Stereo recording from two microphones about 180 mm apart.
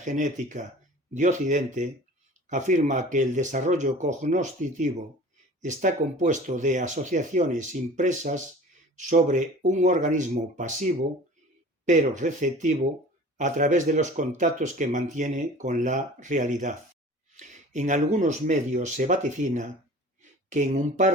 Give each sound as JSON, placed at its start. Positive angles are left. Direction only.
{"t": 0.0, "sound": "speech", "side_deg": -45}